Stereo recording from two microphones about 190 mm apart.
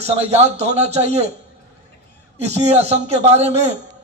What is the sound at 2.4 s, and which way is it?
A man's voice, 35° right (ahead or behind).